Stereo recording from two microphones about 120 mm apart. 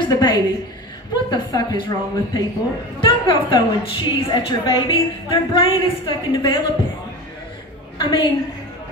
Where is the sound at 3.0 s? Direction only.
40° left (ahead or behind).